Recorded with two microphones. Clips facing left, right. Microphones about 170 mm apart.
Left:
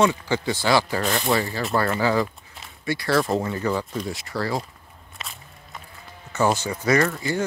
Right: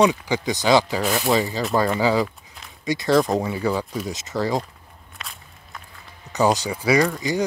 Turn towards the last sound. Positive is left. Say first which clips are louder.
# right 2 dB
turn(degrees=-15)  # may be behind; listen again after turning